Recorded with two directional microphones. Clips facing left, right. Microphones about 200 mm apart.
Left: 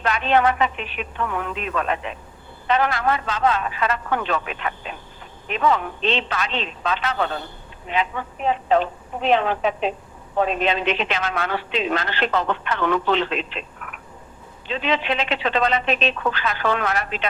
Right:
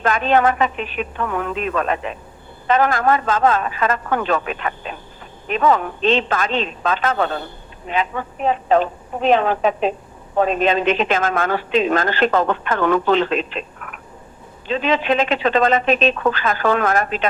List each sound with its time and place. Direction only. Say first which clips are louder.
0.0 s a woman's voice: right 3 dB; 45° right (ahead or behind)